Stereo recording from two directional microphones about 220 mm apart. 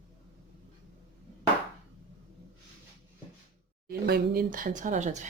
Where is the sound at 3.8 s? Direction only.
45° right (ahead or behind).